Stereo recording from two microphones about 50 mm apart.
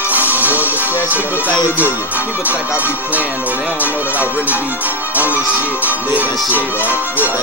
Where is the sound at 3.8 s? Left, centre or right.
Right.